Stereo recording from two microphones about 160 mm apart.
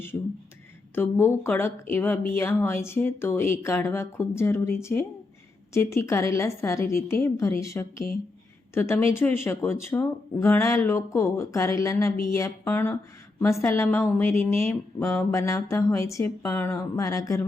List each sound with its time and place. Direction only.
0.9 s speech: 15° left (ahead or behind)